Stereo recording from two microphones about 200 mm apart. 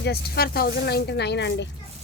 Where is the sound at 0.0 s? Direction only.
50° left (ahead or behind).